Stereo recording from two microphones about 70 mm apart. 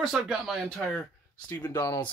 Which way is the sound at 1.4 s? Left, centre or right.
Left.